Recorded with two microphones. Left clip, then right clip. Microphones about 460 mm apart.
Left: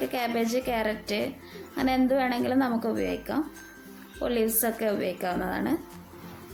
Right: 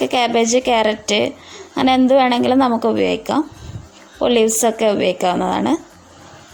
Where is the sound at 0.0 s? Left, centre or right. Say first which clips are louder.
Right 13 dB; right.